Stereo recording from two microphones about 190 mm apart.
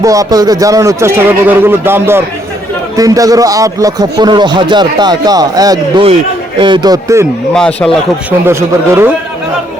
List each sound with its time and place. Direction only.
0.0 s a man's voice: 15° right (ahead or behind)
7.5 s speech: 5° left (ahead or behind)
8.3 s speech: 10° right (ahead or behind)